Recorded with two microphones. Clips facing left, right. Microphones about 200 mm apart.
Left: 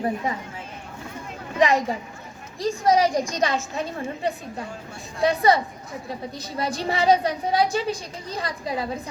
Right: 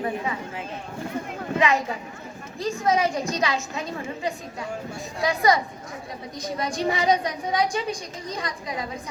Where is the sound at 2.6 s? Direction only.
35° left (ahead or behind).